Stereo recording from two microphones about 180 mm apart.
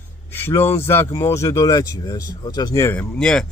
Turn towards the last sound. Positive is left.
turn(degrees=5)  # may be behind; listen again after turning